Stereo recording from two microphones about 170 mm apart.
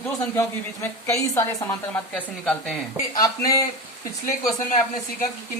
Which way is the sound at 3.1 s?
20° left (ahead or behind).